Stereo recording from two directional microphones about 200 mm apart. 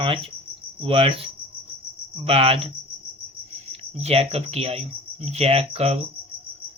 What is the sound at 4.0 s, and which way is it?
Speech, 30° right (ahead or behind).